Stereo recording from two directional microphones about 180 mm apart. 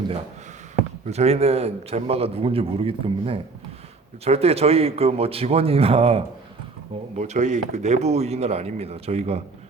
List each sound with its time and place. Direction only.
1.0 s a man's voice: 35° right (ahead or behind)